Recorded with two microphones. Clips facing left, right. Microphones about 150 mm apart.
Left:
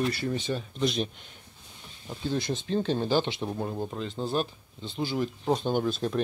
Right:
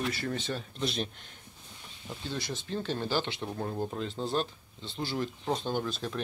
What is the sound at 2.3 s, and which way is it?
Speech, 20° left (ahead or behind).